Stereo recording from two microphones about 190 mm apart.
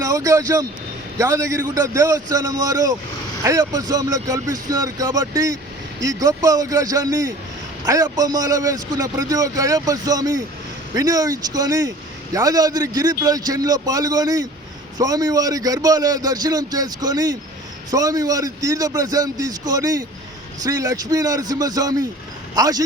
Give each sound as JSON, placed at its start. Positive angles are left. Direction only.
{"t": 0.0, "sound": "a man's voice", "side_deg": -15}